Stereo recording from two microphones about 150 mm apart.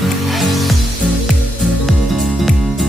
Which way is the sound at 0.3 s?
Centre (ahead or behind).